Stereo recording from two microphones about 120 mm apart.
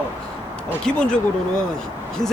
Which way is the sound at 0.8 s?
5° left (ahead or behind).